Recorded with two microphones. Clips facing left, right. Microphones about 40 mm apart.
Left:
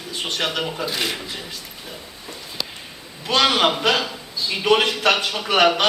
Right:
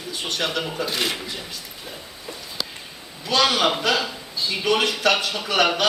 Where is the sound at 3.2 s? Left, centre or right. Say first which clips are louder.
Left 2 dB; left.